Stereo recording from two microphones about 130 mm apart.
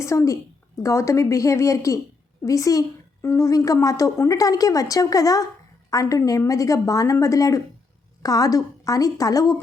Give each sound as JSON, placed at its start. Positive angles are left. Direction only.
{"t": 0.0, "sound": "a woman's voice", "side_deg": 25}